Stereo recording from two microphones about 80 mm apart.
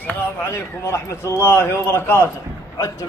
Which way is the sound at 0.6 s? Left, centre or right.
Left.